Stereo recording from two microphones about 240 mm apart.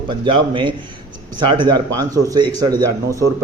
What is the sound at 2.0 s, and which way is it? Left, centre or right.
A man's voice, centre.